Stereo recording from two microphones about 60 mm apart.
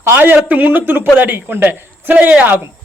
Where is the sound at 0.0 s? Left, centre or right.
Right.